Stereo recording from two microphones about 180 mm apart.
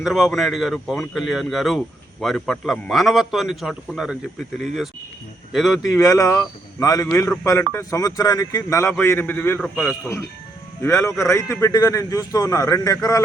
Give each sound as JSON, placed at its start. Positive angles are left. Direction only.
{"t": 0.0, "sound": "a man's voice", "side_deg": 0}
{"t": 6.0, "sound": "a man's voice", "side_deg": 20}